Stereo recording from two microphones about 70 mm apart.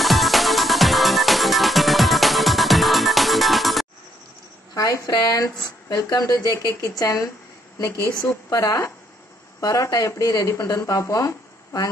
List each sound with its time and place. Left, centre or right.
0.0 s music: centre
4.7 s speech: left
6.7 s a woman's voice: left
8.5 s speech: left
9.6 s speech: left